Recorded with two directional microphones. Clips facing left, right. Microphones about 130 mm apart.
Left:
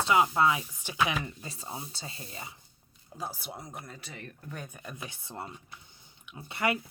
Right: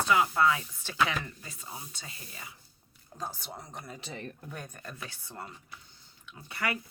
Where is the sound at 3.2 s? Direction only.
10° left (ahead or behind).